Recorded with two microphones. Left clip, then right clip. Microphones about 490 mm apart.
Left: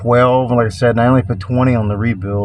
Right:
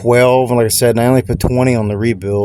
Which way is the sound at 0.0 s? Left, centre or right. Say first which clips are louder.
Right 2 dB; right.